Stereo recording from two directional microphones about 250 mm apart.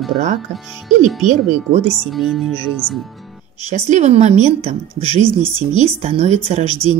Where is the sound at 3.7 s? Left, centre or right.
Right.